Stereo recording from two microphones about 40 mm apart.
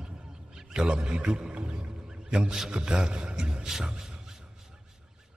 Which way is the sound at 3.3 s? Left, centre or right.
Centre.